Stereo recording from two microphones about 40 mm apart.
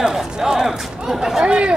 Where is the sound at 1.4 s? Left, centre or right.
Right.